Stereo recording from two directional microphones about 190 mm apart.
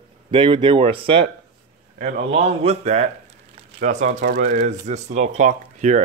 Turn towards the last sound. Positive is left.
turn(degrees=-40)  # may be behind; listen again after turning